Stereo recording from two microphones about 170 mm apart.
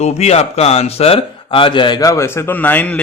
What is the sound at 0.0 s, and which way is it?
Speech, 40° left (ahead or behind).